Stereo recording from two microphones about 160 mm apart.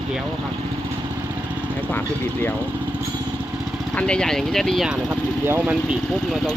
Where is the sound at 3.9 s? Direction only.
5° left (ahead or behind); by 5.8 s 10° right (ahead or behind).